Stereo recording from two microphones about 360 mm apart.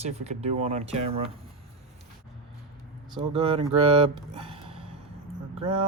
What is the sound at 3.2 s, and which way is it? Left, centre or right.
Speech, centre.